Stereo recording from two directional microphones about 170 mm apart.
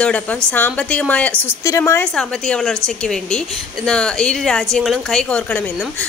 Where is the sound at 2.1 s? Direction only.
5° left (ahead or behind).